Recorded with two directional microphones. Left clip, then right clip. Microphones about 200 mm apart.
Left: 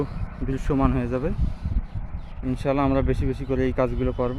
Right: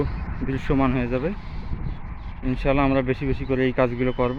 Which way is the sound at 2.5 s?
Centre (ahead or behind).